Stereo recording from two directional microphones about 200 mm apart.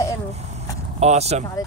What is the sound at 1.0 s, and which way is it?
Speech, 30° right (ahead or behind).